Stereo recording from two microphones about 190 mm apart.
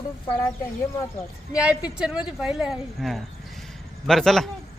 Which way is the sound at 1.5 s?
5° right (ahead or behind).